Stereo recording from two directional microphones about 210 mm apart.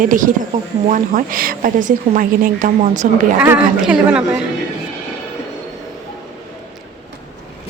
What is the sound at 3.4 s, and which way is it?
A woman's voice, 5° right (ahead or behind).